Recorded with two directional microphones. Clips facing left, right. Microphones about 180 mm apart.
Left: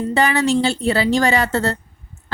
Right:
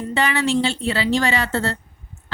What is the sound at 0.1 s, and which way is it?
A woman's voice, 40° left (ahead or behind).